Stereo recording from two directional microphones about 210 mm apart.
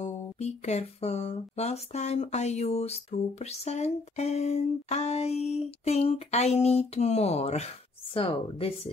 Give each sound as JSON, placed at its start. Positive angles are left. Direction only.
{"t": 0.0, "sound": "speech", "side_deg": 30}